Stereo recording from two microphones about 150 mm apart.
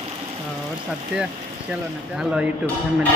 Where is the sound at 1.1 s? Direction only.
5° right (ahead or behind).